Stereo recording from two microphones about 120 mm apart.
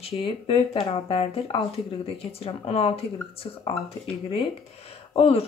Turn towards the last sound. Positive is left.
turn(degrees=50)  # may be behind; listen again after turning